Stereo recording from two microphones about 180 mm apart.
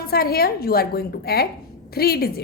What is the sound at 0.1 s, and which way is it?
A woman's voice, 60° left (ahead or behind).